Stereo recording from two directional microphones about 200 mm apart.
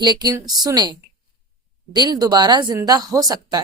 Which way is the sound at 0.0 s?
20° right (ahead or behind).